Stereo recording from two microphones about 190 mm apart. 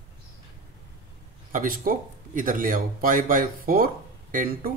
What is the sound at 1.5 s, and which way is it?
Speech, 45° right (ahead or behind).